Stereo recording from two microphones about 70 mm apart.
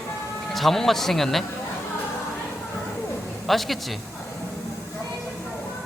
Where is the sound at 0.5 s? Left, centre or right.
Centre.